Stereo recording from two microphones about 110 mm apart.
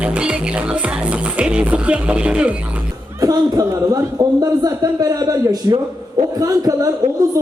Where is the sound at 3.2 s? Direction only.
35° right (ahead or behind).